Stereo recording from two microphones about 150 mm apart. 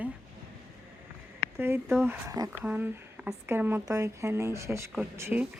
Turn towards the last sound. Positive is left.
turn(degrees=-15)  # may be behind; listen again after turning